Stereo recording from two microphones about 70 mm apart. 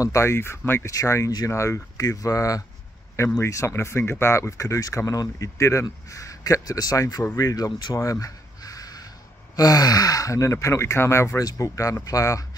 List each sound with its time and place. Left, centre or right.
0.0 s speech: left
0.9 s speech: left
2.0 s speech: left
3.3 s speech: left
7.3 s a sound: left
9.6 s speech: left